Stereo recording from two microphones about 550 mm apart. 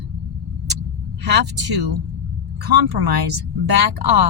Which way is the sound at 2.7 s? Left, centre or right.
Right.